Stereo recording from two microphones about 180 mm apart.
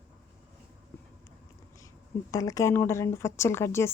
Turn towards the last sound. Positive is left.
turn(degrees=15)  # may be behind; listen again after turning